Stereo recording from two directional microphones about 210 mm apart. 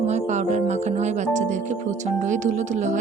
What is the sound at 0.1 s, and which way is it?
A woman's voice, 35° right (ahead or behind).